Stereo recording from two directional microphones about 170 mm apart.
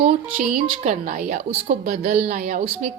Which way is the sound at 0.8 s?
50° right (ahead or behind).